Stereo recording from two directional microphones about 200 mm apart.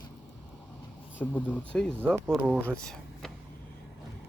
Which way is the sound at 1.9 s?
10° right (ahead or behind).